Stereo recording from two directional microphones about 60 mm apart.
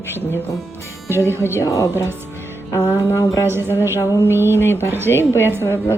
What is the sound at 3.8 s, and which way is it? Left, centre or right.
Speech, right.